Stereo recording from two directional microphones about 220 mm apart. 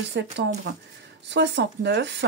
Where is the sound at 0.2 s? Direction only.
50° right (ahead or behind).